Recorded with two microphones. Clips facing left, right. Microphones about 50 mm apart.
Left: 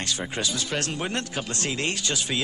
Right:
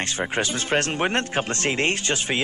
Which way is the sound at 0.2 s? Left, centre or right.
Right.